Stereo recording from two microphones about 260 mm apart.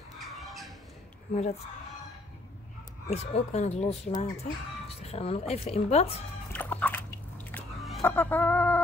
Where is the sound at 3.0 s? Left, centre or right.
Left.